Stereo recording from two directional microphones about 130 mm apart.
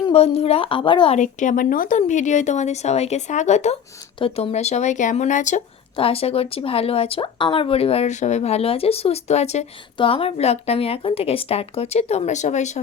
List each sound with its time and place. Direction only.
0.1 s speech: 50° left (ahead or behind)
1.1 s speech: 75° left (ahead or behind)
2.0 s speech: 70° left (ahead or behind)
4.2 s speech: 50° left (ahead or behind); by 5.6 s 70° left (ahead or behind)
6.0 s speech: 50° left (ahead or behind)
10.0 s speech: 45° left (ahead or behind); by 12.8 s 65° left (ahead or behind)